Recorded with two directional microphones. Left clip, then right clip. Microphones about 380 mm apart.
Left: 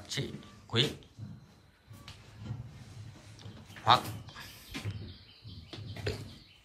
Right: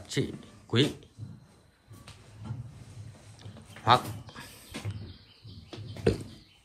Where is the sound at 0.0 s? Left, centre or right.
Centre.